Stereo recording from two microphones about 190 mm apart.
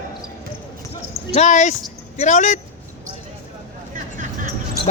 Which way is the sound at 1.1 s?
35° left (ahead or behind).